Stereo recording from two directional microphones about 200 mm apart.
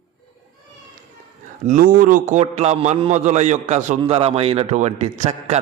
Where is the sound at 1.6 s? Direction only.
40° right (ahead or behind).